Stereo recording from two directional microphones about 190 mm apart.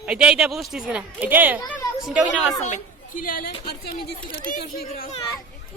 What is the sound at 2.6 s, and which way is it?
A woman's voice, 40° left (ahead or behind).